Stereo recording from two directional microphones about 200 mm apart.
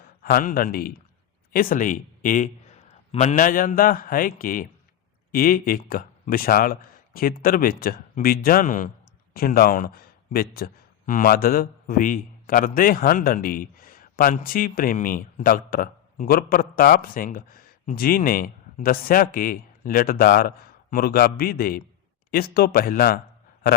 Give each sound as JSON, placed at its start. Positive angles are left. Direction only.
{"t": 0.2, "sound": "speech", "side_deg": 45}